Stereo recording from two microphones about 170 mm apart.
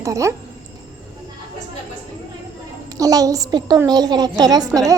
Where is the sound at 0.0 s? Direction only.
20° right (ahead or behind).